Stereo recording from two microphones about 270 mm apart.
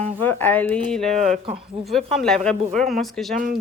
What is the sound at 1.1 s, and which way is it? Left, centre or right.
Speech, right.